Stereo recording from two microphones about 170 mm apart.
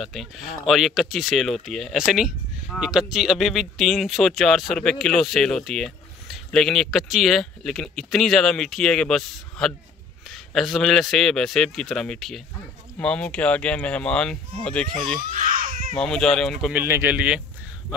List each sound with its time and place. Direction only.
0.0 s speech: centre (ahead or behind)
15.2 s crying: 50° right (ahead or behind)
16.0 s speech: 5° left (ahead or behind)
16.7 s speech: 15° right (ahead or behind)